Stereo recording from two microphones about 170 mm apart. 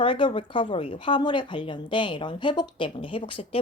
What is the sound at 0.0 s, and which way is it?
A woman's voice, 30° left (ahead or behind).